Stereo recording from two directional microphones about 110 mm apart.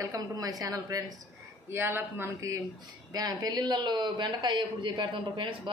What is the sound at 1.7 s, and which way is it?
Speech, 20° right (ahead or behind).